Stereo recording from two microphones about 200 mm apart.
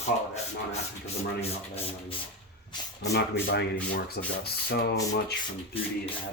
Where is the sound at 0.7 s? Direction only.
30° left (ahead or behind).